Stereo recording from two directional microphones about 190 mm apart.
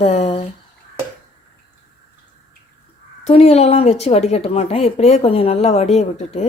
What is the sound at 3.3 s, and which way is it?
Speech, 35° left (ahead or behind).